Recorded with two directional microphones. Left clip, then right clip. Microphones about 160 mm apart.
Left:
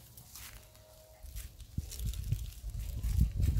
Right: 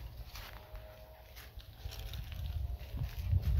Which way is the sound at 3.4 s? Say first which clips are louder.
Left 5 dB; 20° left (ahead or behind).